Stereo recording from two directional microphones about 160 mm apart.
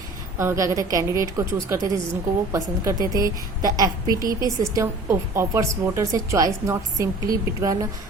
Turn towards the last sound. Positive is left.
turn(degrees=-20)  # may be behind; listen again after turning